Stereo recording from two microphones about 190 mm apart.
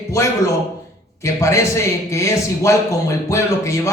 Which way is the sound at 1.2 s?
15° left (ahead or behind).